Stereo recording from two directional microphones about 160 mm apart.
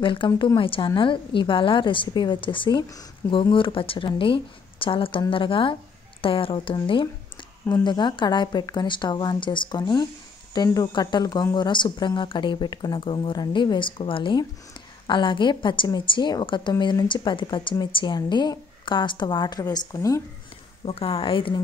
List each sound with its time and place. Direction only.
0.0 s a woman's voice: 30° left (ahead or behind)
20.8 s a woman's voice: 35° left (ahead or behind)